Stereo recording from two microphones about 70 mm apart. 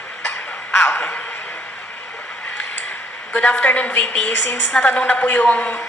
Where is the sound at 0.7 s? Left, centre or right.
Left.